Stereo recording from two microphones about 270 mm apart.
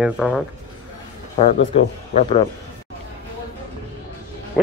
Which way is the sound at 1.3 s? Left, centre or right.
Left.